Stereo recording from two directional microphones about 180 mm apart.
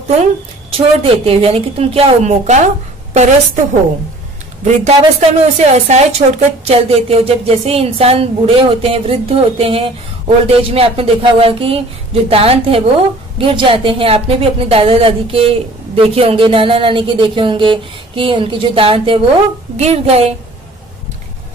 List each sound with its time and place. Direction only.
0.7 s a woman's voice: 30° right (ahead or behind)
4.8 s a woman's voice: 35° right (ahead or behind)